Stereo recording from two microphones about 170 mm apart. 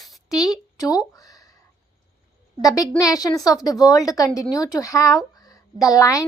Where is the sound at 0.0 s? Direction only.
Centre (ahead or behind).